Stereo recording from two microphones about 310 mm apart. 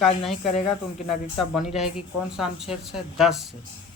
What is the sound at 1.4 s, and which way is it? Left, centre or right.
A man's voice, centre.